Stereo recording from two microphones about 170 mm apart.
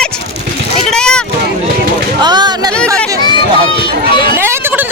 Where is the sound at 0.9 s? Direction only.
5° left (ahead or behind).